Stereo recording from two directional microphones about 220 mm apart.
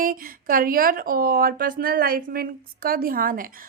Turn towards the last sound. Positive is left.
turn(degrees=-40)  # may be behind; listen again after turning